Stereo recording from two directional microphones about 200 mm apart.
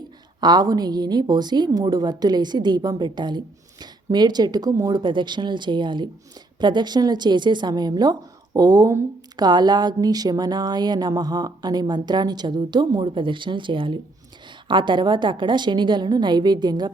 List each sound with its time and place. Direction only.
0.3 s a woman's voice: 20° right (ahead or behind)